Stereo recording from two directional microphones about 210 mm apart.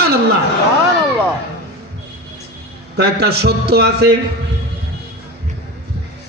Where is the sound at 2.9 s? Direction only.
55° right (ahead or behind).